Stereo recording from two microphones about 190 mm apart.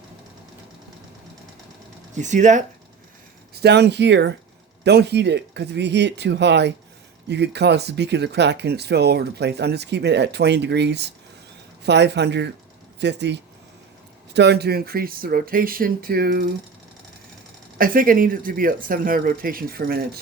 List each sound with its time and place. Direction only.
2.1 s speech: 40° right (ahead or behind)
3.5 s speech: 60° right (ahead or behind)
17.7 s speech: 50° right (ahead or behind)